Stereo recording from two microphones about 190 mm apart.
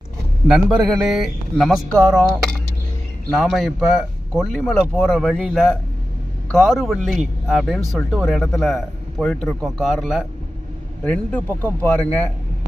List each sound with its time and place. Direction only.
0.4 s a man's voice: centre (ahead or behind)